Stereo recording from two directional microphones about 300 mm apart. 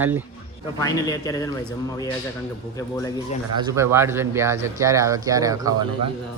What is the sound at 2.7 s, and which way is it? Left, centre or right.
Speech, centre.